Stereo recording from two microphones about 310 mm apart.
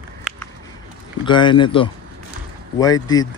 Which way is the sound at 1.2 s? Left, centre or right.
Centre.